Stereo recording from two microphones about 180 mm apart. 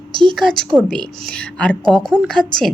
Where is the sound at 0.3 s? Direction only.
5° left (ahead or behind).